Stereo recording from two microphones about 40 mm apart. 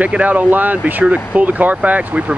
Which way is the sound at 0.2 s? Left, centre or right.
Right.